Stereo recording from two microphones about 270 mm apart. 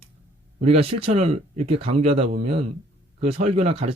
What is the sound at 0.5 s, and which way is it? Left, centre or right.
Speech, right.